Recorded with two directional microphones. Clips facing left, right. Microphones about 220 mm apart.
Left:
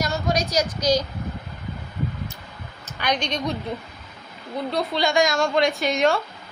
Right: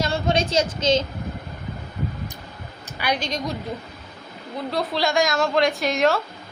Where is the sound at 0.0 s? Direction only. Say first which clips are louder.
Right 2 dB; 25° right (ahead or behind).